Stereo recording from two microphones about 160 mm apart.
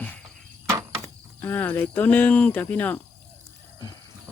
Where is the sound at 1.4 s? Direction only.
10° left (ahead or behind).